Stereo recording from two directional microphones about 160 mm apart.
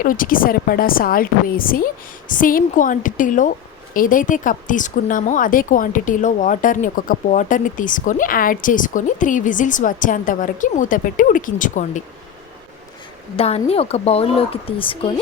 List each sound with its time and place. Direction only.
0.0 s speech: 60° left (ahead or behind)
13.3 s speech: 40° left (ahead or behind)